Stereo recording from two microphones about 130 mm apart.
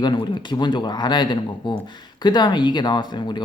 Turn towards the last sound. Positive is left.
turn(degrees=35)  # may be behind; listen again after turning